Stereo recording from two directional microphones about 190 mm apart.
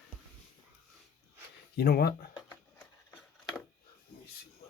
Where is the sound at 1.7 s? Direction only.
55° left (ahead or behind).